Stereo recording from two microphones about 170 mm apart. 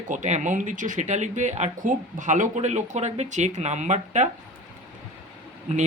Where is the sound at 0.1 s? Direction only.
45° right (ahead or behind).